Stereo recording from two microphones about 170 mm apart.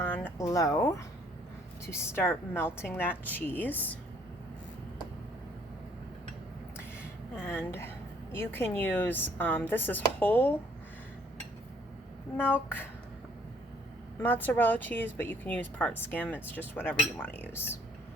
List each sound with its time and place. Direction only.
0.0 s speech: 10° left (ahead or behind)
7.4 s speech: 15° left (ahead or behind)
12.4 s speech: 10° left (ahead or behind)
14.2 s speech: 10° left (ahead or behind)